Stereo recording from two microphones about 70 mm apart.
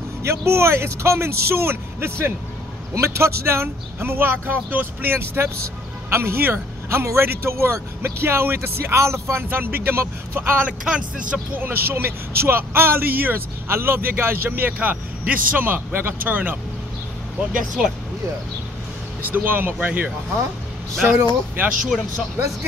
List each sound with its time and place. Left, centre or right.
0.2 s speech: right
10.9 s speech: centre
11.5 s speech: right
17.5 s speech: centre
19.3 s speech: right
21.6 s speech: right